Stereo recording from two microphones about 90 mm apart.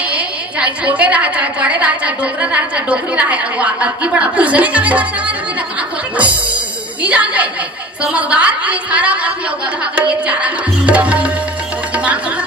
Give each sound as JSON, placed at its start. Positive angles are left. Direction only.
{"t": 0.1, "sound": "a woman's voice", "side_deg": -15}
{"t": 7.0, "sound": "a woman's voice", "side_deg": -15}